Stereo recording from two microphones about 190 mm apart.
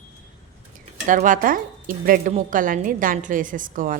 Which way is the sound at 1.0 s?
45° right (ahead or behind).